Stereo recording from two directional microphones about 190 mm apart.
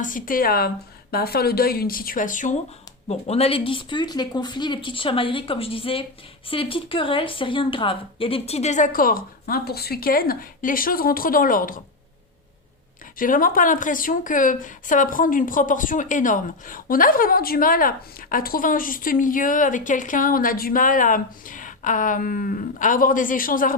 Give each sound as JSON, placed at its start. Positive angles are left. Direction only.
{"t": 0.0, "sound": "speech", "side_deg": 45}
{"t": 13.1, "sound": "speech", "side_deg": 45}